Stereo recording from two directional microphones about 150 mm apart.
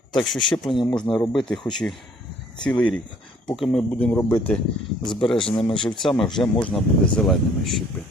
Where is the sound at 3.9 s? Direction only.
10° left (ahead or behind).